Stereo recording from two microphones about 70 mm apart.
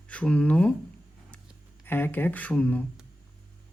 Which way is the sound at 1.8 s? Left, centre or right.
Left.